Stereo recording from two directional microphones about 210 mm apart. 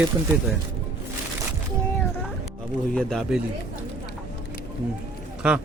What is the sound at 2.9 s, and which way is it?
Speech, centre (ahead or behind).